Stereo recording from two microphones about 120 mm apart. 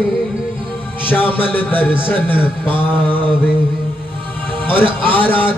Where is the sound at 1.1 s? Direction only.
15° left (ahead or behind).